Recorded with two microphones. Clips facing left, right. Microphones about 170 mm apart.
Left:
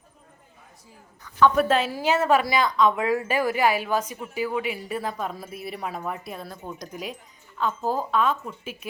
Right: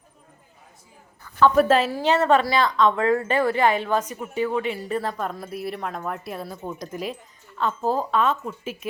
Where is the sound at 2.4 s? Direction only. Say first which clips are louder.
Right 1 dB; 15° left (ahead or behind).